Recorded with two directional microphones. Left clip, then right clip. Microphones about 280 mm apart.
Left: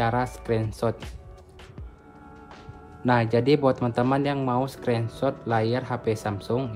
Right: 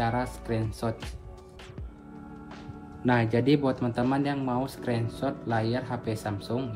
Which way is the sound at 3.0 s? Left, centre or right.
Centre.